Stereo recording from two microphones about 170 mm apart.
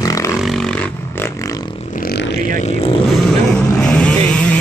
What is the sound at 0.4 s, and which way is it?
Vehicle, centre (ahead or behind).